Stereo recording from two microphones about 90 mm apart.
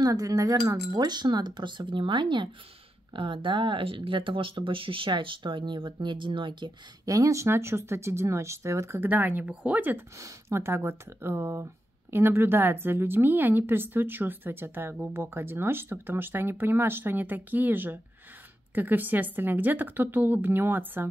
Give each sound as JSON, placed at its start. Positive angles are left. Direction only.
{"t": 0.0, "sound": "speech", "side_deg": -40}
{"t": 7.1, "sound": "a woman's voice", "side_deg": -40}
{"t": 10.1, "sound": "a woman's voice", "side_deg": -35}